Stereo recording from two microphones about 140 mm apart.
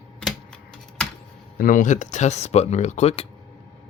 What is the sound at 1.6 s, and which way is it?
Speech, 70° left (ahead or behind).